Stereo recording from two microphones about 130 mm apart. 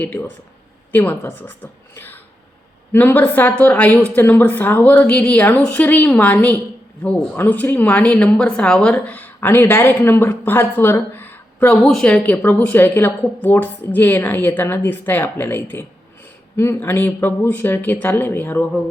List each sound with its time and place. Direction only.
0.0 s a woman's voice: 15° left (ahead or behind)